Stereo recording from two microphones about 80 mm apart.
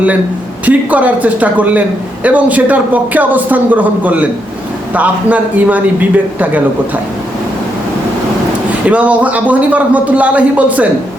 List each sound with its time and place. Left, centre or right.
0.6 s a man's voice: centre
8.9 s a man's voice: centre